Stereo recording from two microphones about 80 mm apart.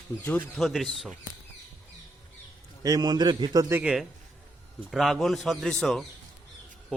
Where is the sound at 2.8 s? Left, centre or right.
Right.